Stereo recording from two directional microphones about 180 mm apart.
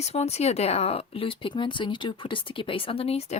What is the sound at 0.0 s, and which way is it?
Speech, 35° left (ahead or behind).